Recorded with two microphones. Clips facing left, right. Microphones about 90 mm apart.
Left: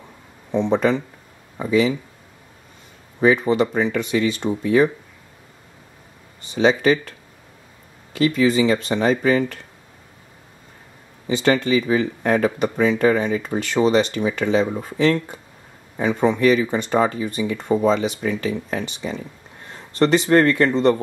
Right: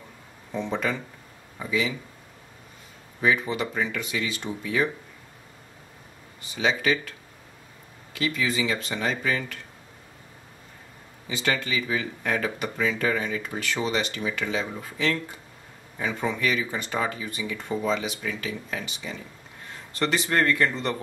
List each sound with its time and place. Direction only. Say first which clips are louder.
0.5 s speech: left 9 dB; 25° left (ahead or behind)
3.2 s speech: left 8 dB; 35° left (ahead or behind)
6.5 s speech: left 8 dB; 35° left (ahead or behind)
8.2 s speech: left 10 dB; 35° left (ahead or behind)
11.2 s speech: left 9 dB; 30° left (ahead or behind)